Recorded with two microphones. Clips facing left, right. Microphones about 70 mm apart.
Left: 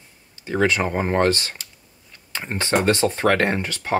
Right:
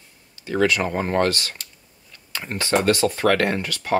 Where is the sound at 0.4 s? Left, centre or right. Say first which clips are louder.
Even; left.